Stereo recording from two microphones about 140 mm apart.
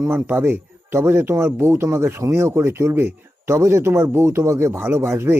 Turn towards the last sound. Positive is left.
turn(degrees=-15)  # may be behind; listen again after turning